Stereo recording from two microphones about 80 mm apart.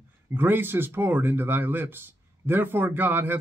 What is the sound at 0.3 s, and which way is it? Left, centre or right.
Speech, right.